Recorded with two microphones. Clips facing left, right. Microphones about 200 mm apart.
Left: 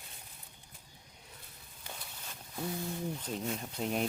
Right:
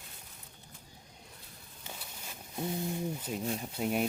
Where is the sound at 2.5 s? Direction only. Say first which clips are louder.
Right 3 dB; 20° right (ahead or behind).